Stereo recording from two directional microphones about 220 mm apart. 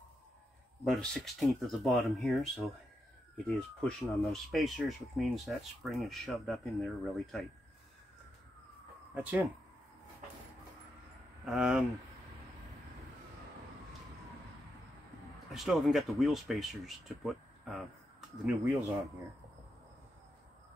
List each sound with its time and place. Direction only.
0.8 s speech: centre (ahead or behind)
9.1 s speech: 5° right (ahead or behind)
11.4 s speech: centre (ahead or behind)
15.5 s speech: centre (ahead or behind)